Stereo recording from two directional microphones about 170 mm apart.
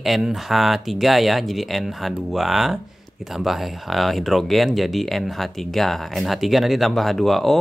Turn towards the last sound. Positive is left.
turn(degrees=0)  # may be behind; listen again after turning